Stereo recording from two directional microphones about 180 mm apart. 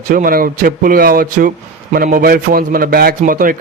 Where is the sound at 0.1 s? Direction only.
50° right (ahead or behind).